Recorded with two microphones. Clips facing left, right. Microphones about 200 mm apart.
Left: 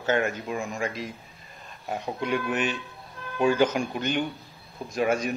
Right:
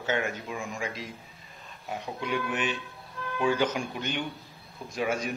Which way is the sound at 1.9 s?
45° left (ahead or behind).